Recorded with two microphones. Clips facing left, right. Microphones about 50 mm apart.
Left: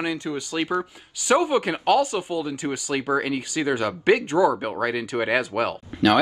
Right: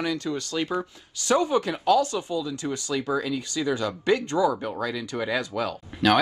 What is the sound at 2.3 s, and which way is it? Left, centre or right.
Speech, left.